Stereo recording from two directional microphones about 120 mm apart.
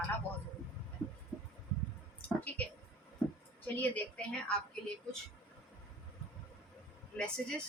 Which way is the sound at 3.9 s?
10° left (ahead or behind).